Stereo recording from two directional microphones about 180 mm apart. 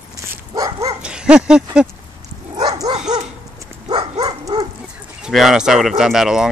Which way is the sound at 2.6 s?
20° right (ahead or behind).